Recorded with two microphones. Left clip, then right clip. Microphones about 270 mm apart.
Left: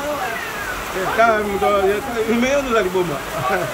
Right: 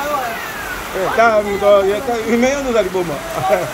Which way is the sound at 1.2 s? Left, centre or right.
Centre.